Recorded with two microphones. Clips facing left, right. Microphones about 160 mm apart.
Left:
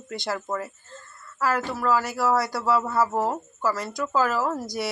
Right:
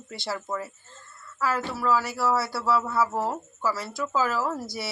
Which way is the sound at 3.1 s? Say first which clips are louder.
Left 3 dB; 15° left (ahead or behind).